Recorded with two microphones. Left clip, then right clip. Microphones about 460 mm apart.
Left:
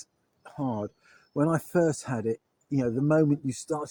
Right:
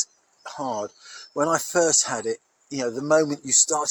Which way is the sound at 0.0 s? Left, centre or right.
Left.